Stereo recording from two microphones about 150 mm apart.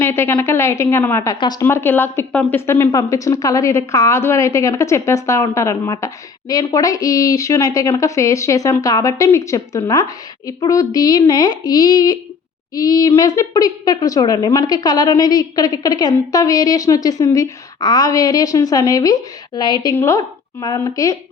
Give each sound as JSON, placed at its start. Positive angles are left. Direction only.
{"t": 0.0, "sound": "a woman's voice", "side_deg": 15}
{"t": 1.6, "sound": "a woman's voice", "side_deg": 15}